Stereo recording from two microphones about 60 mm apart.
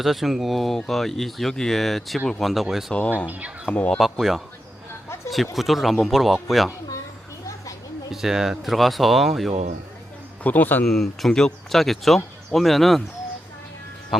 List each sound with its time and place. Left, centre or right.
0.0 s speech: centre
3.7 s a man's voice: left
3.9 s speech: centre
5.5 s speech: centre
8.1 s speech: centre
10.4 s a man's voice: left
10.8 s speech: centre
14.1 s speech: centre